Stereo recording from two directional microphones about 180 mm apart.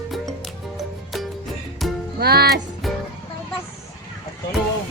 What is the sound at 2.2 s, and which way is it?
Speech, 60° right (ahead or behind).